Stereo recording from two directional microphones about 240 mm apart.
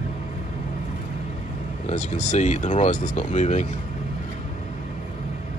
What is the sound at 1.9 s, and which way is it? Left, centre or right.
Speech, left.